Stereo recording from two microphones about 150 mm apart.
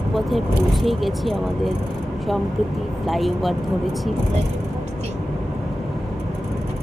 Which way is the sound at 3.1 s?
Centre (ahead or behind).